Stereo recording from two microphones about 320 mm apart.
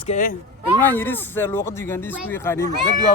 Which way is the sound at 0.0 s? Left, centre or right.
Left.